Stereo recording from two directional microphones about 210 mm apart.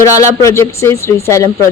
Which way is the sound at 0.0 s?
15° left (ahead or behind).